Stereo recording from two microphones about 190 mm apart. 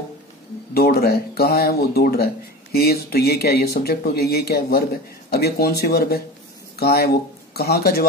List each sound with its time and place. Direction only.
0.7 s speech: 55° left (ahead or behind)